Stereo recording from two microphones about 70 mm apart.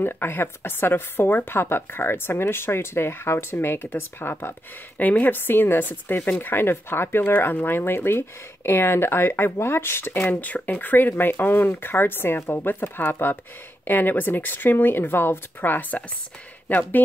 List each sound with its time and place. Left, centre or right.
0.0 s a woman's voice: left